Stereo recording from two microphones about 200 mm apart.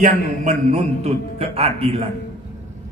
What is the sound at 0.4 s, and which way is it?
A man's voice, 35° right (ahead or behind).